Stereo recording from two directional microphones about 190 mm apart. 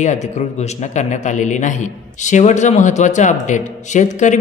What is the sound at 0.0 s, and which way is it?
A man's voice, 40° left (ahead or behind).